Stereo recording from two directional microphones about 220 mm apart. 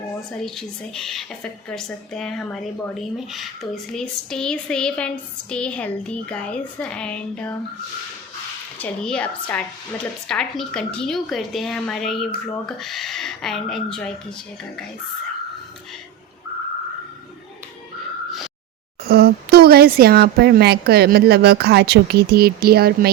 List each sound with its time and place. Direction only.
0.3 s a woman's voice: centre (ahead or behind)
8.8 s a woman's voice: 5° left (ahead or behind)
19.0 s speech: 45° right (ahead or behind)